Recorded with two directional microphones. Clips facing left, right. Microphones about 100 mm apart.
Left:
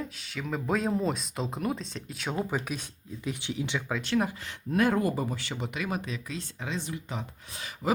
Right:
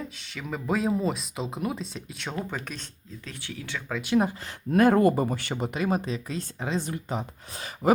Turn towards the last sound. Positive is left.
turn(degrees=-40)  # may be behind; listen again after turning